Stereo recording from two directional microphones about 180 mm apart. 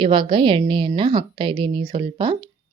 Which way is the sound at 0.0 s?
30° right (ahead or behind).